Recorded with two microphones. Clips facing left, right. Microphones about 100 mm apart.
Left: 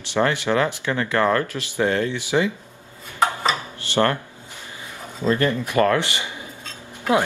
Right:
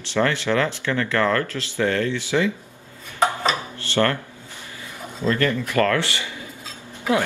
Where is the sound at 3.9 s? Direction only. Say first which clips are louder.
Left 1 dB; 20° left (ahead or behind).